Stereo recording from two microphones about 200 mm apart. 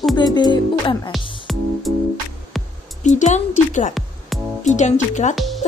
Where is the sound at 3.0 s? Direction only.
35° left (ahead or behind).